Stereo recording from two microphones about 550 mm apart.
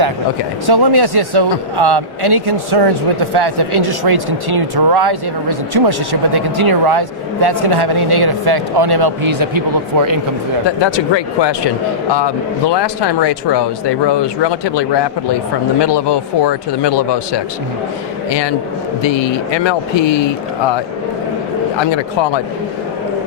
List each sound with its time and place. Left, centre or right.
0.7 s speech: right
10.8 s a man's voice: left
21.8 s speech: left